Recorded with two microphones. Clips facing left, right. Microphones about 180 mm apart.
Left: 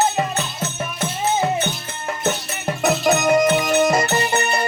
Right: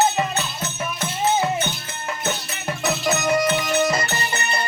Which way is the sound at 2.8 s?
45° left (ahead or behind).